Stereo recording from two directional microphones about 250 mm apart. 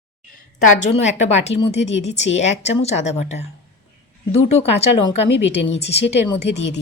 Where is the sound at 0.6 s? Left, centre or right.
Left.